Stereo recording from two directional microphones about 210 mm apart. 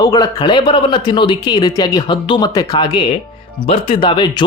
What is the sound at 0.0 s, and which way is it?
Speech, 20° left (ahead or behind).